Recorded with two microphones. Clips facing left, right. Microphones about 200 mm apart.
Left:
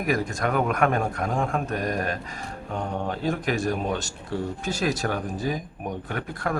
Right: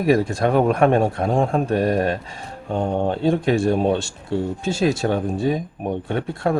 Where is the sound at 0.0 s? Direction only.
30° right (ahead or behind).